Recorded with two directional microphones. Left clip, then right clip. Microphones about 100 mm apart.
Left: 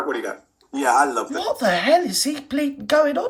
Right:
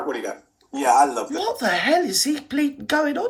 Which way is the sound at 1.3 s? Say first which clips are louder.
Left 2 dB; 35° left (ahead or behind).